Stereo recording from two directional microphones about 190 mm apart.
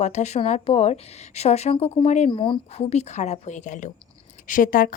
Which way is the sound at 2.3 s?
25° left (ahead or behind).